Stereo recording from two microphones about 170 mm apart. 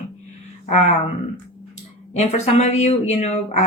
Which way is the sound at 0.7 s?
40° left (ahead or behind).